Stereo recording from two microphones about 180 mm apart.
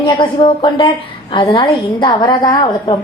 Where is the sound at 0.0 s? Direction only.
25° left (ahead or behind).